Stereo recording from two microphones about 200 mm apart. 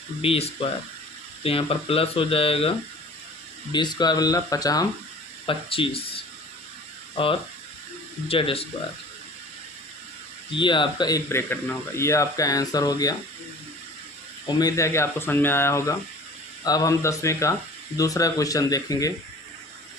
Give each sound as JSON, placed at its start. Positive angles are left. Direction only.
{"t": 0.2, "sound": "speech", "side_deg": 30}
{"t": 10.5, "sound": "speech", "side_deg": 25}
{"t": 14.4, "sound": "speech", "side_deg": 15}